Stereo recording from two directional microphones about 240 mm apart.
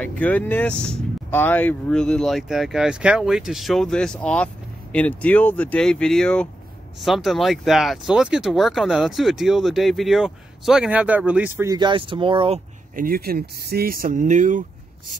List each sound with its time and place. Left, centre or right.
0.0 s speech: centre; by 12.5 s right
12.9 s speech: right